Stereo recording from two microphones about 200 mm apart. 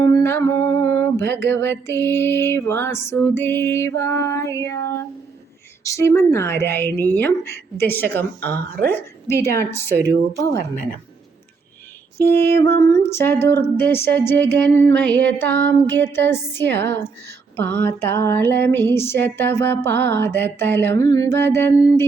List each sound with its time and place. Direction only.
0.0 s music: 15° left (ahead or behind)
5.8 s a sound: 15° left (ahead or behind)
8.5 s a woman's voice: 50° right (ahead or behind)
8.9 s a woman's voice: 10° left (ahead or behind)
9.3 s a woman's voice: 50° right (ahead or behind)
12.5 s a sound: 10° left (ahead or behind)